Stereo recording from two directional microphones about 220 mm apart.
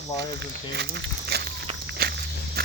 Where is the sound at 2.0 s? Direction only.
45° right (ahead or behind).